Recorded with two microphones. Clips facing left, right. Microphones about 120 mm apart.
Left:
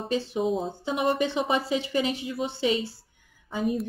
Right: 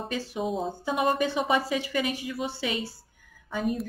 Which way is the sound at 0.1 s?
25° left (ahead or behind).